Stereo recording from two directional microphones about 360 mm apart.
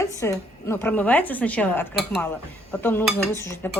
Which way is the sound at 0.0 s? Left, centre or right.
Centre.